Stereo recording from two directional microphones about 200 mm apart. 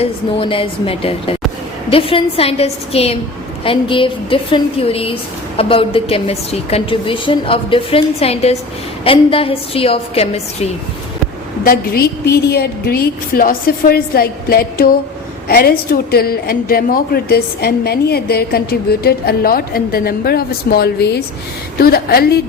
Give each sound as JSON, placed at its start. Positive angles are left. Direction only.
{"t": 0.0, "sound": "a woman's voice", "side_deg": 25}
{"t": 11.6, "sound": "a woman's voice", "side_deg": 50}